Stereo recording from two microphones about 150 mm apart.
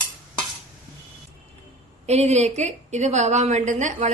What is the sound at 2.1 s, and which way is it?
A woman's voice, 45° right (ahead or behind).